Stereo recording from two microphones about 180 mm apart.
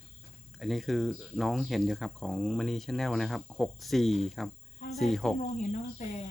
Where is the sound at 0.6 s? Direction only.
Centre (ahead or behind).